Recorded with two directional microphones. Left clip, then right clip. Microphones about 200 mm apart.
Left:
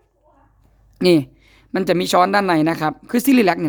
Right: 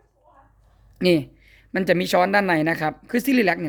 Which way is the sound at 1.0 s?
20° left (ahead or behind).